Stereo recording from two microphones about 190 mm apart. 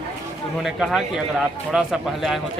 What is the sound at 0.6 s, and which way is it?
Speech, centre (ahead or behind).